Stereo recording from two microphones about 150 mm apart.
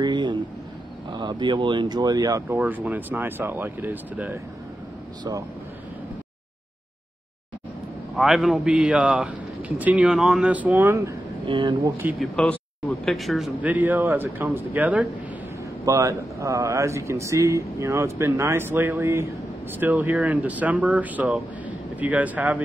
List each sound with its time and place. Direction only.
0.0 s a sound: 30° right (ahead or behind)
1.1 s speech: 30° right (ahead or behind)
2.6 s a man's voice: 10° right (ahead or behind)
8.2 s a man's voice: centre (ahead or behind)
11.4 s speech: 35° right (ahead or behind)
12.2 s speech: 5° left (ahead or behind)
13.6 s a man's voice: 10° right (ahead or behind)
15.8 s a man's voice: 20° right (ahead or behind)